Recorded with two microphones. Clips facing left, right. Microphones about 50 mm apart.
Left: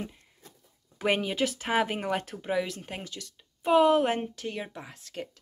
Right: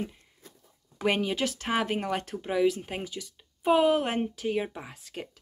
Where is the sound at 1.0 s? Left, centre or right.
Centre.